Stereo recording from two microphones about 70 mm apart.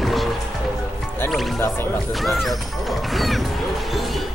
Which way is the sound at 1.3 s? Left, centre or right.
Centre.